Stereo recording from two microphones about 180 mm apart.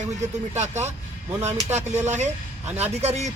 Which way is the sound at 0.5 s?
40° right (ahead or behind).